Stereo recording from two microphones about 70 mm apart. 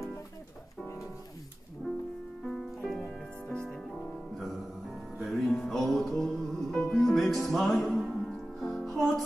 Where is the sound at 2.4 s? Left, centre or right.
Centre.